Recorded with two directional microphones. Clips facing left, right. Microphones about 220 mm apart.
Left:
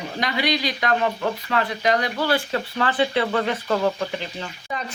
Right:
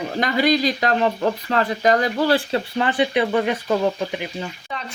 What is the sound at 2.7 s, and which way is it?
Speech, 15° right (ahead or behind).